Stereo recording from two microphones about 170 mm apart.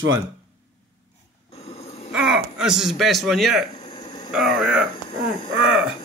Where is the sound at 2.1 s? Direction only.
5° right (ahead or behind).